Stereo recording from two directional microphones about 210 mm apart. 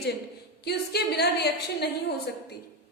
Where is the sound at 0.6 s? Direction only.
50° left (ahead or behind).